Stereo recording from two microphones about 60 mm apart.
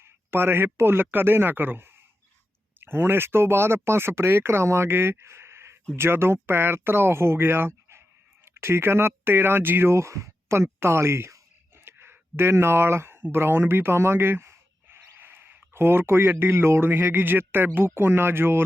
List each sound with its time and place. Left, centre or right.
0.0 s speech: right
11.9 s a sound: right
13.3 s speech: right